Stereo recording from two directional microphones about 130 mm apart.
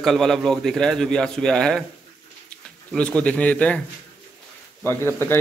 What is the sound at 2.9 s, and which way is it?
Speech, 10° left (ahead or behind).